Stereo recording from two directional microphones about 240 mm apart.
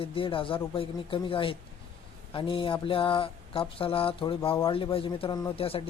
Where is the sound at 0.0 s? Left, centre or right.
Left.